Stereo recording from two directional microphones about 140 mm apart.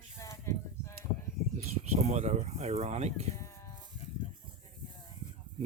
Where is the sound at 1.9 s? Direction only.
55° right (ahead or behind).